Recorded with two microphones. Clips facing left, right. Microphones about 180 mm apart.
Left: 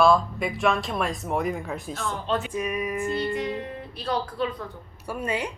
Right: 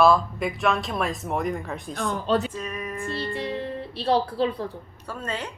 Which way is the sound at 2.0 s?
40° right (ahead or behind).